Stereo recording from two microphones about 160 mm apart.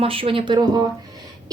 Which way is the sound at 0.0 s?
35° right (ahead or behind).